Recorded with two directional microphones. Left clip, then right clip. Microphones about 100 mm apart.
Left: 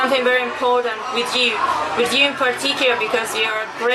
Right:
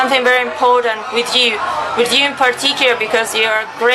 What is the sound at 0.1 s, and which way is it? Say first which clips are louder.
A woman's voice: right 4 dB; 20° right (ahead or behind).